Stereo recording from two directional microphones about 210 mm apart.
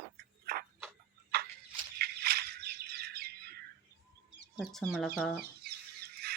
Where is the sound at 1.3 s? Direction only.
50° right (ahead or behind).